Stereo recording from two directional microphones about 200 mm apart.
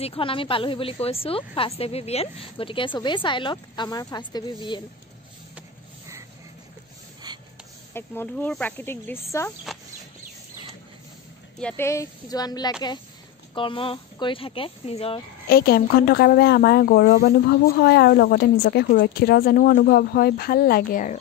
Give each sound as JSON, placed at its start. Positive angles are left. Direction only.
{"t": 0.0, "sound": "speech", "side_deg": 25}
{"t": 7.3, "sound": "a sound", "side_deg": -20}
{"t": 7.9, "sound": "speech", "side_deg": 10}
{"t": 11.6, "sound": "speech", "side_deg": 10}
{"t": 15.4, "sound": "a woman's voice", "side_deg": 50}